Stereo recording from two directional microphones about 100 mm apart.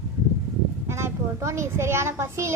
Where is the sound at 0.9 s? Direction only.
30° right (ahead or behind).